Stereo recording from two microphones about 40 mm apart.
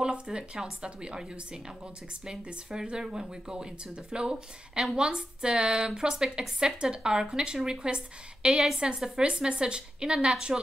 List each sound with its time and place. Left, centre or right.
0.0 s speech: right
8.5 s a woman's voice: centre
8.8 s speech: centre